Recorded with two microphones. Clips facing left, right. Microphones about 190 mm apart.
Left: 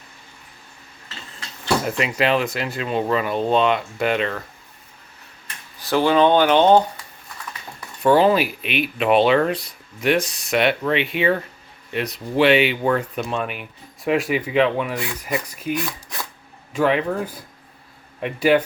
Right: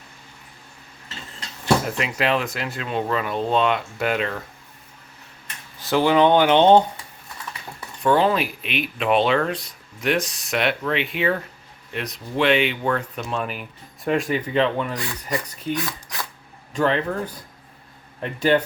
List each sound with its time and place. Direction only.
2.0 s speech: centre (ahead or behind)
5.8 s speech: 15° right (ahead or behind)
8.0 s speech: 5° left (ahead or behind)
18.2 s speech: 10° left (ahead or behind)